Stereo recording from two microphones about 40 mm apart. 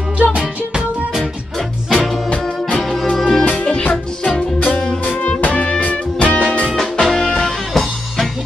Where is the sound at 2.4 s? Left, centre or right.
Centre.